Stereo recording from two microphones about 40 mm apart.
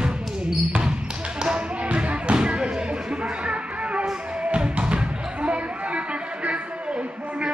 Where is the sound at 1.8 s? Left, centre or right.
Right.